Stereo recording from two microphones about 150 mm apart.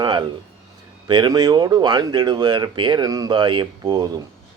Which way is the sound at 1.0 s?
30° right (ahead or behind).